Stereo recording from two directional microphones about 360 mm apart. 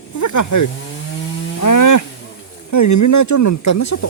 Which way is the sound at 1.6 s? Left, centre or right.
Left.